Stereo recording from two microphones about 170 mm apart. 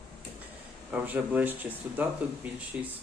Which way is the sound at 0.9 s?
10° right (ahead or behind).